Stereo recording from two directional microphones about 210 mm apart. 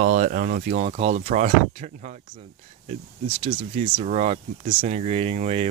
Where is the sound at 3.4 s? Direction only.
30° right (ahead or behind).